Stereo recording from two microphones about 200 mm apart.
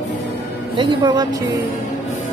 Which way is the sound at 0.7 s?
25° right (ahead or behind).